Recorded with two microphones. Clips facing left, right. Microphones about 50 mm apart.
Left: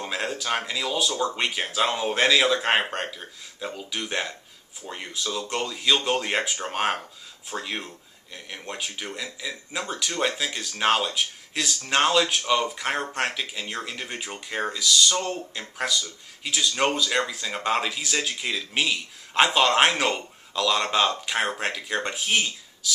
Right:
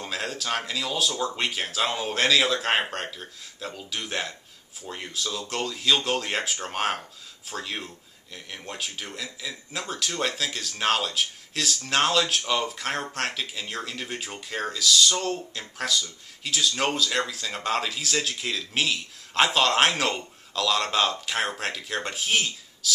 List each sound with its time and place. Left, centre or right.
0.0 s speech: centre